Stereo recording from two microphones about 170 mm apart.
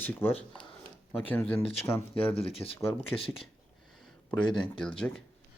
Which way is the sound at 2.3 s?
35° left (ahead or behind).